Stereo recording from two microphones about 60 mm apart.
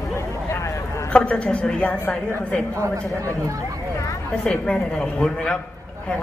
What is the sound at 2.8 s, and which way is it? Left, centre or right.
Speech, right.